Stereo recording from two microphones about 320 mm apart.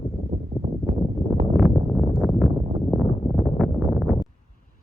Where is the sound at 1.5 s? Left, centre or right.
Centre.